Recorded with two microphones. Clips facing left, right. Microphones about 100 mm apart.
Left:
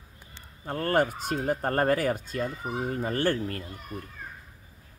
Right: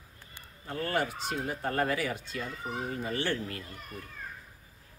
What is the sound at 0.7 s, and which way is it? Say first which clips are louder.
Speech: left 6 dB; 45° left (ahead or behind).